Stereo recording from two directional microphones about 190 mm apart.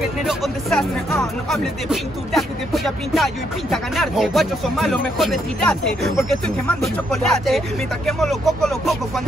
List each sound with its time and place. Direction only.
0.0 s speech: centre (ahead or behind)